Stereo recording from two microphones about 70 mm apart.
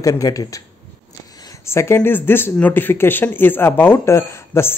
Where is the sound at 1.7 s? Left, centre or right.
Left.